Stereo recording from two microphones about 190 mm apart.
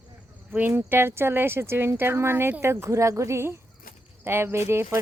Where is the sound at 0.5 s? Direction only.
10° right (ahead or behind).